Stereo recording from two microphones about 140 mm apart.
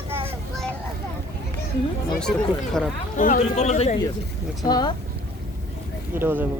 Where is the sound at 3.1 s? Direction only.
65° left (ahead or behind).